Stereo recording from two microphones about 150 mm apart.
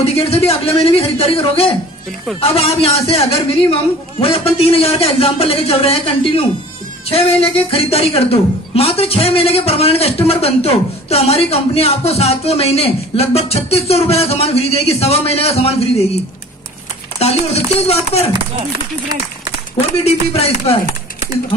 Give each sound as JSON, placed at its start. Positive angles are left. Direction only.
{"t": 0.1, "sound": "a woman's voice", "side_deg": 40}
{"t": 17.2, "sound": "speech", "side_deg": 45}
{"t": 20.1, "sound": "speech", "side_deg": 40}